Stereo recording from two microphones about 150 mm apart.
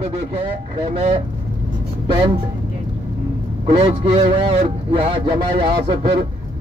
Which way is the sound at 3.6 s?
40° right (ahead or behind).